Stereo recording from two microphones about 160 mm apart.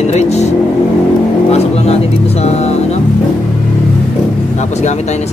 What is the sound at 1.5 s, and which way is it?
Speech, 40° left (ahead or behind).